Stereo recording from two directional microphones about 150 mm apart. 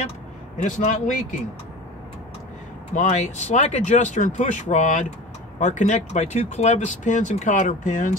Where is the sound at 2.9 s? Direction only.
50° left (ahead or behind).